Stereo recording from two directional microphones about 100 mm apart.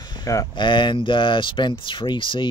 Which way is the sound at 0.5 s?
50° left (ahead or behind).